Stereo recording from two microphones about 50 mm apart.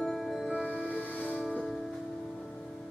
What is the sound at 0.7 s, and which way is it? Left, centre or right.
Music, right.